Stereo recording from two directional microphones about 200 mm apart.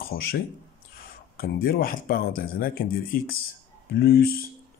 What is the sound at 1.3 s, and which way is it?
Speech, 45° left (ahead or behind).